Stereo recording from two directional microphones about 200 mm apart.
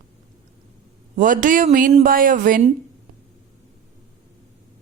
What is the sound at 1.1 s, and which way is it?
Speech, 40° right (ahead or behind).